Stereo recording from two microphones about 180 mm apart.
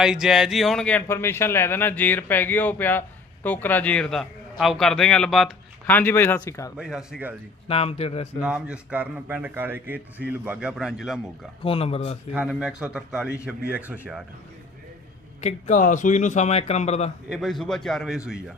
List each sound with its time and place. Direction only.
0.0 s a man's voice: 5° right (ahead or behind)
5.8 s speech: 10° left (ahead or behind)
6.7 s a man's voice: 5° right (ahead or behind)
7.7 s a man's voice: 35° left (ahead or behind)
8.4 s a man's voice: 5° right (ahead or behind)
11.6 s a man's voice: 30° left (ahead or behind)
12.3 s a man's voice: 5° right (ahead or behind)
15.4 s a man's voice: 40° left (ahead or behind)
17.2 s a man's voice: centre (ahead or behind)